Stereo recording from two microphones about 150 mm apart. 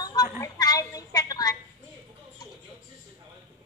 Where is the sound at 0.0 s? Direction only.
25° left (ahead or behind).